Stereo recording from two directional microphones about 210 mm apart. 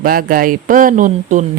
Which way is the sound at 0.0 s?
45° right (ahead or behind).